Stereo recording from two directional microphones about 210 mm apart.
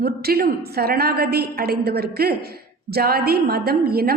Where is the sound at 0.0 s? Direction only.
50° right (ahead or behind).